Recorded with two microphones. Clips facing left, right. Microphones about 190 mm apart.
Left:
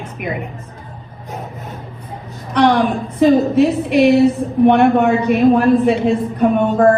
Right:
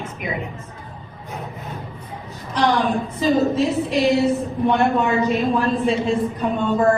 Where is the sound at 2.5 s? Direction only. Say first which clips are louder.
Left 5 dB; 65° left (ahead or behind).